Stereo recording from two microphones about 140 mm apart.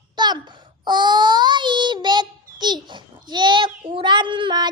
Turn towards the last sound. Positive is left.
turn(degrees=-35)  # may be behind; listen again after turning